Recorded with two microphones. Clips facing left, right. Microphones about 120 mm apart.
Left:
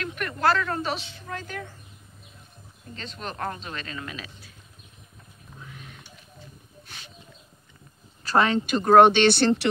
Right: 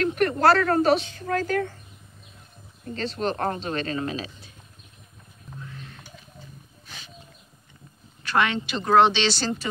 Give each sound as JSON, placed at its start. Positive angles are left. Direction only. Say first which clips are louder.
{"t": 0.0, "sound": "speech", "louder": "right 5 dB", "side_deg": -40}
{"t": 2.9, "sound": "speech", "louder": "right 9 dB", "side_deg": -35}
{"t": 5.7, "sound": "a sound", "louder": "right 2 dB", "side_deg": 10}
{"t": 8.2, "sound": "speech", "louder": "left 2 dB", "side_deg": 35}